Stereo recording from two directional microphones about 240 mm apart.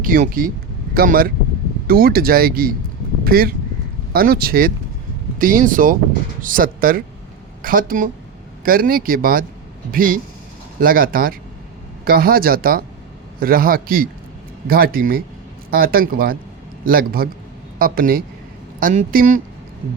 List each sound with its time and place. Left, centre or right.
0.0 s speech: right